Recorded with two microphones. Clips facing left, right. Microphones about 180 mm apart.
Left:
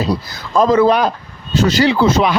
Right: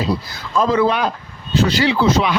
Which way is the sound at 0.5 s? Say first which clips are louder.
Left 5 dB; 45° left (ahead or behind).